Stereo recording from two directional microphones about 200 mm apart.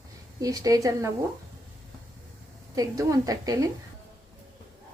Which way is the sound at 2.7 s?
15° right (ahead or behind).